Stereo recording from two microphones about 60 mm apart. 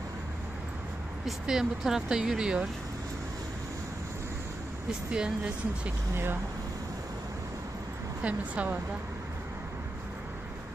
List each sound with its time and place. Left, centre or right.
1.4 s speech: centre
5.1 s speech: centre
8.2 s a woman's voice: right